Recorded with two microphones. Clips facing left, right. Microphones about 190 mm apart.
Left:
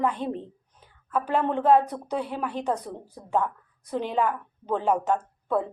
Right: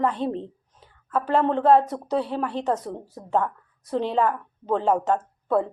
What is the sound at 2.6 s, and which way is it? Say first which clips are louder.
A woman's voice: right 3 dB; centre (ahead or behind).